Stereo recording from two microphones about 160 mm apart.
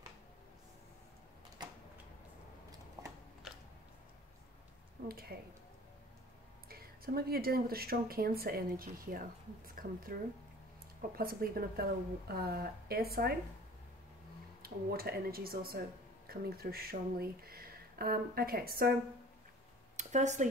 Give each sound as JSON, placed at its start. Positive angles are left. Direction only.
{"t": 3.0, "sound": "a sound", "side_deg": -25}
{"t": 3.5, "sound": "a sound", "side_deg": 0}
{"t": 6.7, "sound": "speech", "side_deg": -70}
{"t": 11.1, "sound": "speech", "side_deg": -70}
{"t": 14.6, "sound": "speech", "side_deg": -70}
{"t": 20.0, "sound": "speech", "side_deg": -45}